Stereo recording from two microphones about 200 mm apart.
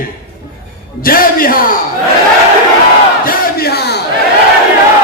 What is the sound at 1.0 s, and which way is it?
Speech, 45° left (ahead or behind).